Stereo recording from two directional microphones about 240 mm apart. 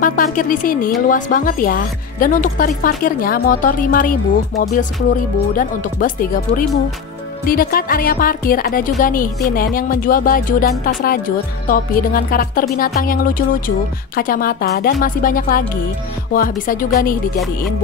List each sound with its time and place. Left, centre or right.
0.0 s a woman's voice: left